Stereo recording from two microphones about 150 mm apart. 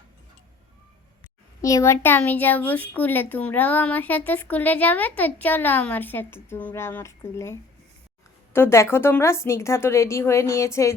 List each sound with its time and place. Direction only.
1.6 s a woman's voice: 20° left (ahead or behind)